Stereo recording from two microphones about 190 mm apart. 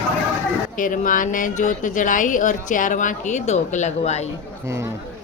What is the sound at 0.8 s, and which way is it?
Speech, 45° left (ahead or behind).